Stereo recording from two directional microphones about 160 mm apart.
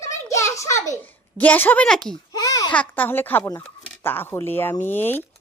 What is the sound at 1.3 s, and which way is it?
Speech, 10° left (ahead or behind).